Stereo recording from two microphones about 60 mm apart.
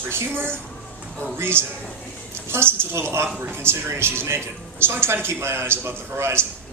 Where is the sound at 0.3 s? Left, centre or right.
Right.